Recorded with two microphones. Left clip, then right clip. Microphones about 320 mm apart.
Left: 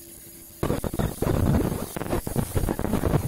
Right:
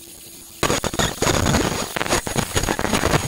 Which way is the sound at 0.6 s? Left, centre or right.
Right.